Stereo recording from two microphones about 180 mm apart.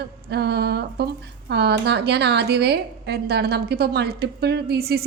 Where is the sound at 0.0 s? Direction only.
65° right (ahead or behind).